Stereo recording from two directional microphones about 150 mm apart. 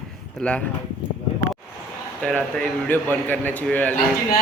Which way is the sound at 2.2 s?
5° left (ahead or behind).